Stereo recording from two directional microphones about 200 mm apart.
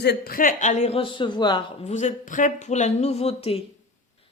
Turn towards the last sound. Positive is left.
turn(degrees=30)  # may be behind; listen again after turning